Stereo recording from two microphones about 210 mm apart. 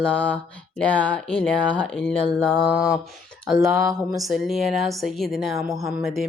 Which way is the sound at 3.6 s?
15° right (ahead or behind).